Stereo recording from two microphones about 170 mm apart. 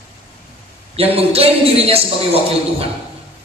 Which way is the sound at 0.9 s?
35° right (ahead or behind).